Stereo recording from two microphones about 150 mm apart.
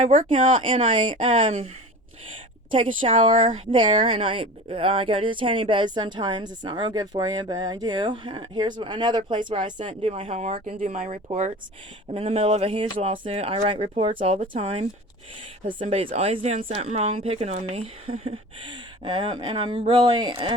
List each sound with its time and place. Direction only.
0.3 s speech: 35° right (ahead or behind)
10.1 s speech: 45° right (ahead or behind)
10.8 s speech: 65° right (ahead or behind)
12.1 s speech: 40° right (ahead or behind)